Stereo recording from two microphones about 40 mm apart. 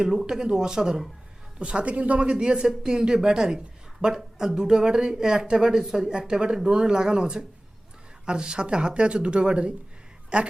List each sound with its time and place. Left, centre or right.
0.0 s speech: centre
1.5 s speech: right